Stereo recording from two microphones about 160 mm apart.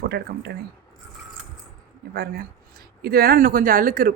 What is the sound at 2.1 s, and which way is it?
Speech, 75° right (ahead or behind).